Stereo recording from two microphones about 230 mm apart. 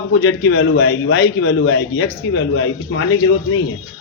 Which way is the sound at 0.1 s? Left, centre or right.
Left.